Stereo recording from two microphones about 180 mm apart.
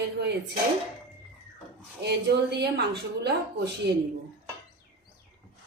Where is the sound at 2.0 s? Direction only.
65° right (ahead or behind).